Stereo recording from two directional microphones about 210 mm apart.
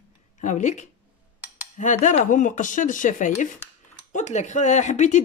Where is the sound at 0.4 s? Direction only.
35° left (ahead or behind).